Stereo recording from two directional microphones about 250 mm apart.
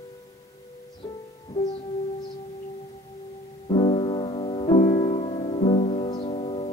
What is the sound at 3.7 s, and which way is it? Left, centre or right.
Music, left.